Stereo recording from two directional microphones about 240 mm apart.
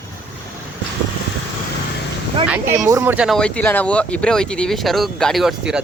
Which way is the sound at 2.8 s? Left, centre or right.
Centre.